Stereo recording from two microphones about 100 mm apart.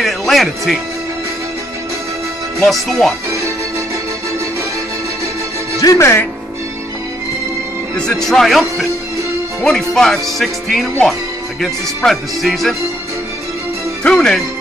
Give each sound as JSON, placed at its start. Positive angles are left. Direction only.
{"t": 0.0, "sound": "music", "side_deg": 0}
{"t": 2.6, "sound": "speech", "side_deg": 0}
{"t": 3.3, "sound": "speech", "side_deg": -30}
{"t": 5.8, "sound": "speech", "side_deg": 35}
{"t": 8.0, "sound": "speech", "side_deg": 5}
{"t": 14.0, "sound": "speech", "side_deg": 10}